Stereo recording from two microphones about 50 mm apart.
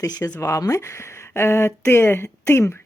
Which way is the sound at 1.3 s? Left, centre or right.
Left.